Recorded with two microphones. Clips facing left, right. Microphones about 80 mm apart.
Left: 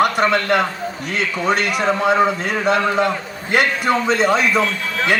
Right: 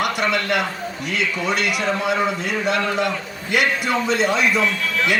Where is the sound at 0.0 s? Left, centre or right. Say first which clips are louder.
Left 5 dB; left.